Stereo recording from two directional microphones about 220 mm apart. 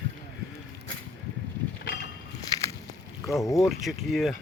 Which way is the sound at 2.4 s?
15° left (ahead or behind).